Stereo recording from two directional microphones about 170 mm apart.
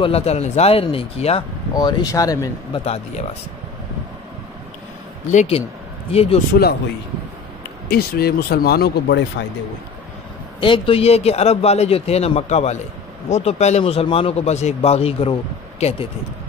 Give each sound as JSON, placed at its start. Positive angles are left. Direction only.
{"t": 0.0, "sound": "a man's voice", "side_deg": 35}
{"t": 1.7, "sound": "speech", "side_deg": 25}
{"t": 2.8, "sound": "a man's voice", "side_deg": 35}
{"t": 5.3, "sound": "a man's voice", "side_deg": 45}
{"t": 6.5, "sound": "speech", "side_deg": 65}
{"t": 7.9, "sound": "speech", "side_deg": 65}
{"t": 10.6, "sound": "a man's voice", "side_deg": 30}